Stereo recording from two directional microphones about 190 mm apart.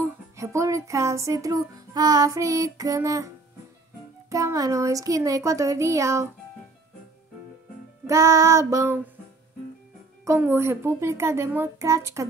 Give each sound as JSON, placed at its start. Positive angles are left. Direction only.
{"t": 0.0, "sound": "music", "side_deg": -15}
{"t": 4.3, "sound": "music", "side_deg": -15}
{"t": 8.1, "sound": "music", "side_deg": -15}
{"t": 10.2, "sound": "music", "side_deg": -10}